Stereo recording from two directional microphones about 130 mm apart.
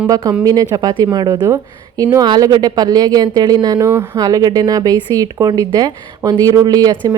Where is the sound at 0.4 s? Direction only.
30° right (ahead or behind).